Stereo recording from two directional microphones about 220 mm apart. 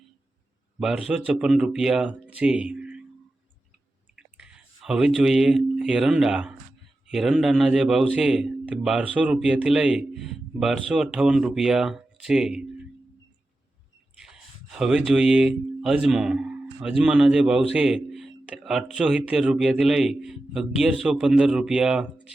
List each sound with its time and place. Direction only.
0.8 s a man's voice: centre (ahead or behind)
4.1 s a man's voice: 5° right (ahead or behind)
14.2 s a man's voice: 5° right (ahead or behind)